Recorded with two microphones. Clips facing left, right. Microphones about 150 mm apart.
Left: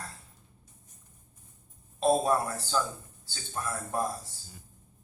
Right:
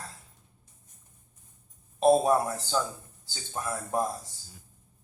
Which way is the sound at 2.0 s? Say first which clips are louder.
Right 4 dB; 20° right (ahead or behind).